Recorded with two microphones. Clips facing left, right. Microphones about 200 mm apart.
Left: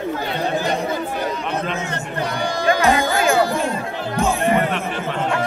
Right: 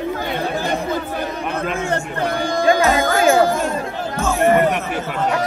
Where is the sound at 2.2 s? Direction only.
50° right (ahead or behind).